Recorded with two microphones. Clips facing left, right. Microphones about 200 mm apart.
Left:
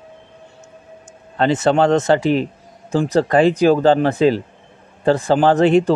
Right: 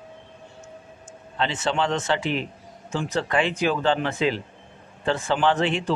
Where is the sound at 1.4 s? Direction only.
40° left (ahead or behind).